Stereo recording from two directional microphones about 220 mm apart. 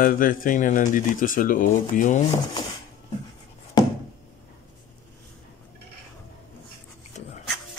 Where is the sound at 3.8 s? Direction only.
15° left (ahead or behind).